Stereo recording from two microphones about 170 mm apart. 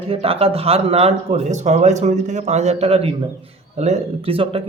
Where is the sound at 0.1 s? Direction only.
35° right (ahead or behind).